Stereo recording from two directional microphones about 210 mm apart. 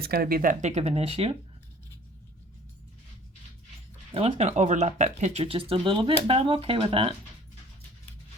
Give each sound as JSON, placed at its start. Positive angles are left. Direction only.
{"t": 0.0, "sound": "speech", "side_deg": -45}
{"t": 4.1, "sound": "speech", "side_deg": -30}